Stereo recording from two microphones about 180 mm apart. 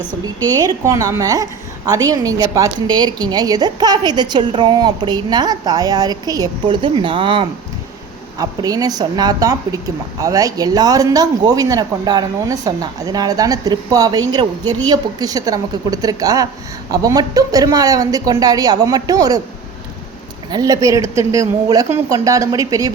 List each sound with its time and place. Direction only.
0.5 s speech: 20° right (ahead or behind)
20.5 s speech: 20° right (ahead or behind)